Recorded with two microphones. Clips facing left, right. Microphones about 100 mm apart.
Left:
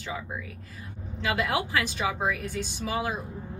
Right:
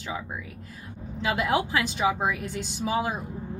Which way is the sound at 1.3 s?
20° right (ahead or behind).